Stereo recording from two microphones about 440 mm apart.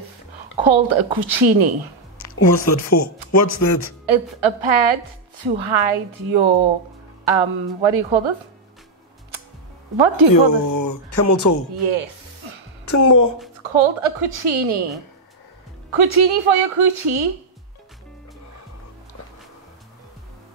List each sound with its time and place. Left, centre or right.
0.6 s a woman's voice: right
2.3 s speech: left
4.0 s a woman's voice: right
9.9 s a woman's voice: right
10.4 s speech: left
11.8 s music: right
12.8 s a woman's voice: left
13.7 s a woman's voice: right
15.9 s a woman's voice: right